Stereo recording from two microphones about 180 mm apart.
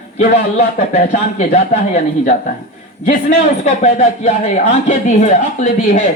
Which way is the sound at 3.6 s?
40° left (ahead or behind).